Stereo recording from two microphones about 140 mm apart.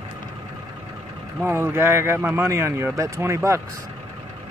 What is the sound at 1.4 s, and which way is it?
Speech, 20° right (ahead or behind).